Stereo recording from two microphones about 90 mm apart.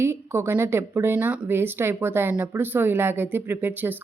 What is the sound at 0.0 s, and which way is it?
A woman's voice, 30° right (ahead or behind).